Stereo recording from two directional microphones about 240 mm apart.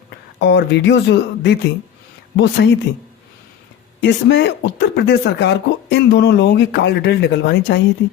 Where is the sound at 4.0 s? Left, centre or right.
Left.